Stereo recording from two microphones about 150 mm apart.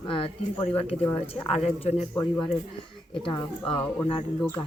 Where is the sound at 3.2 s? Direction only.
35° left (ahead or behind).